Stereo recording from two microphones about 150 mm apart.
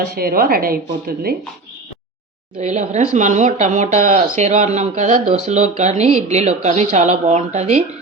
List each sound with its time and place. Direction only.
0.2 s a woman's voice: 85° right
2.6 s speech: 50° right (ahead or behind)